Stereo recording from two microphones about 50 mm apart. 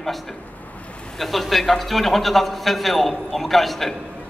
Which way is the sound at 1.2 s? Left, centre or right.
Centre.